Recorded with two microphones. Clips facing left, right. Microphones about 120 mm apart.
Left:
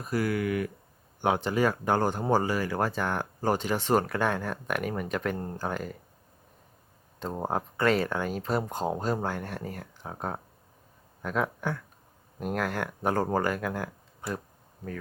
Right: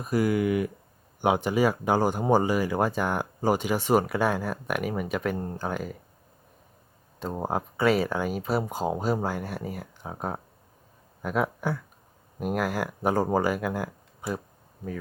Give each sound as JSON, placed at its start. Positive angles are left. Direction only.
{"t": 0.0, "sound": "speech", "side_deg": -15}
{"t": 7.2, "sound": "speech", "side_deg": -5}